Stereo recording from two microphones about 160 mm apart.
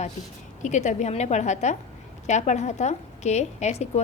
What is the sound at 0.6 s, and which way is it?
A woman's voice, 50° left (ahead or behind).